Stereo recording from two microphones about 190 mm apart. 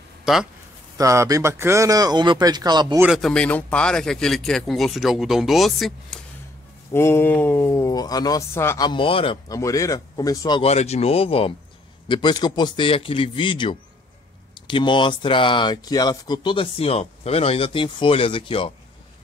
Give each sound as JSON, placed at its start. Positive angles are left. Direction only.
{"t": 0.2, "sound": "a sound", "side_deg": 0}
{"t": 0.9, "sound": "speech", "side_deg": -15}
{"t": 3.0, "sound": "speech", "side_deg": 0}
{"t": 6.9, "sound": "speech", "side_deg": 10}
{"t": 9.6, "sound": "speech", "side_deg": 15}
{"t": 10.6, "sound": "a man's voice", "side_deg": 35}